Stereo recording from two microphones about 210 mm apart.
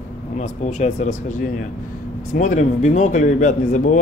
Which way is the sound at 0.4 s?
35° left (ahead or behind).